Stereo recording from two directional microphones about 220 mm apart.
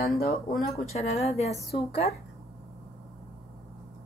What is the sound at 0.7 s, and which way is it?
Speech, 30° left (ahead or behind).